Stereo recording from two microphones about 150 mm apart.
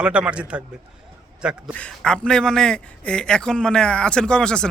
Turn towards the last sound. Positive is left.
turn(degrees=5)  # may be behind; listen again after turning